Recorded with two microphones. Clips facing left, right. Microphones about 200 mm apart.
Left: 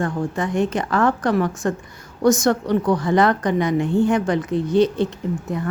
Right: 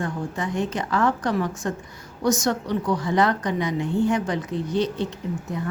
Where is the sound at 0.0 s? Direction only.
50° left (ahead or behind).